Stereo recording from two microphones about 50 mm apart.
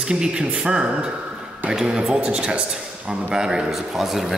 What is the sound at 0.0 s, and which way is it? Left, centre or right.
A man's voice, centre.